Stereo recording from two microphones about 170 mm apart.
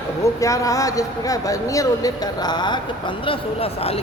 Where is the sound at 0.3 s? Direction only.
20° left (ahead or behind).